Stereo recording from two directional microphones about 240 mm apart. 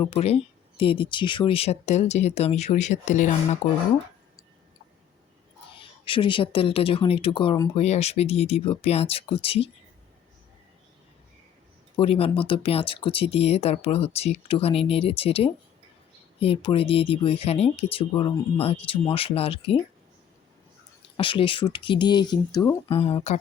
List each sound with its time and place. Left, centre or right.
0.0 s speech: left
6.1 s speech: left
11.9 s speech: left
21.2 s speech: left